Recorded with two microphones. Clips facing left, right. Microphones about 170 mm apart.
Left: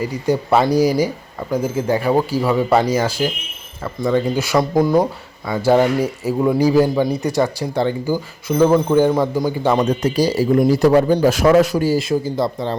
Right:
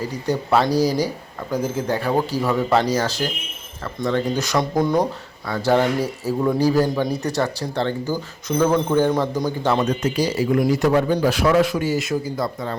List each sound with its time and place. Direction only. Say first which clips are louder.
0.0 s speech: left 4 dB; 10° left (ahead or behind)
9.8 s a man's voice: left 4 dB; 30° left (ahead or behind)